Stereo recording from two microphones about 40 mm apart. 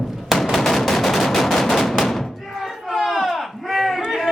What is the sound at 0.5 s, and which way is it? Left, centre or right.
Gunshot, centre.